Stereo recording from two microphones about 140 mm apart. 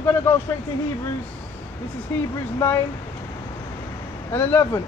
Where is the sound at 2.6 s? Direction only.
20° left (ahead or behind).